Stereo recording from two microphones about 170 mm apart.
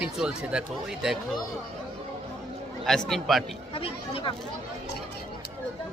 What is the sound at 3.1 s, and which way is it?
Speech, centre (ahead or behind).